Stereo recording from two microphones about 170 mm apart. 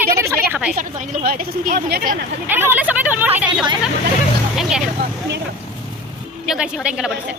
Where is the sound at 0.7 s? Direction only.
50° right (ahead or behind).